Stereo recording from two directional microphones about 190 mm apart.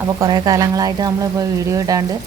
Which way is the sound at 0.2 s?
20° right (ahead or behind).